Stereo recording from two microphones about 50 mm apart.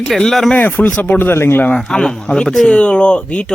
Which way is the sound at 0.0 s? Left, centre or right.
Centre.